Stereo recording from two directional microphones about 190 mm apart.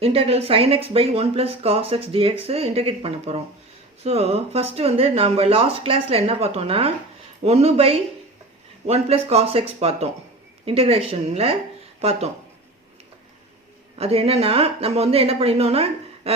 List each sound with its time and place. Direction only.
0.0 s speech: 30° right (ahead or behind)
14.0 s speech: 30° right (ahead or behind)